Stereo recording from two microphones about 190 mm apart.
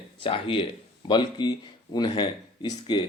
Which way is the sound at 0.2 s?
25° left (ahead or behind).